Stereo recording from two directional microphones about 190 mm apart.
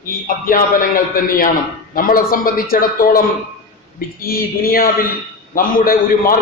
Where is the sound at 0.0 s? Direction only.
45° left (ahead or behind).